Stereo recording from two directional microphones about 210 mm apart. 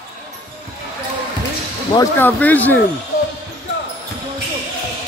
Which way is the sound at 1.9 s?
10° left (ahead or behind).